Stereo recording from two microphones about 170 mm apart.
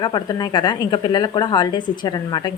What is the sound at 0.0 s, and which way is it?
A woman's voice, 25° left (ahead or behind).